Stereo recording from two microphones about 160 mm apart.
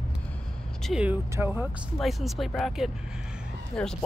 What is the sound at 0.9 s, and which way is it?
Speech, 5° right (ahead or behind).